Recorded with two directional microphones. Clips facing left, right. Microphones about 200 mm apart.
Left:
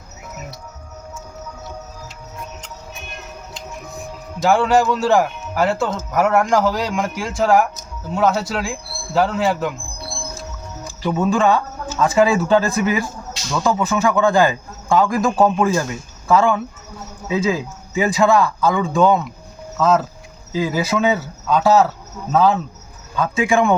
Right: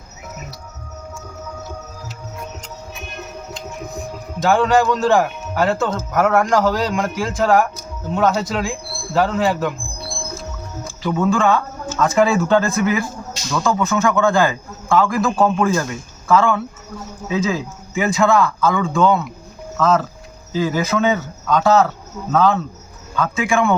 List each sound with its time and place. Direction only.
4.4 s a man's voice: 5° left (ahead or behind)
11.0 s speech: 20° left (ahead or behind)